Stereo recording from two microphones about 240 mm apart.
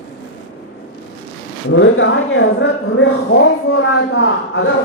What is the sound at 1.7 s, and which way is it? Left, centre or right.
Speech, left.